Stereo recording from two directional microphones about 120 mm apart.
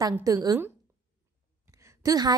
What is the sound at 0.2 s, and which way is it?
Speech, 30° right (ahead or behind).